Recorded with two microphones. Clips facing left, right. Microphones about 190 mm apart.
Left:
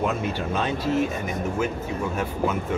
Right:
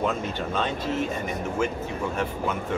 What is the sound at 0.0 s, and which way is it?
Speech, 10° left (ahead or behind).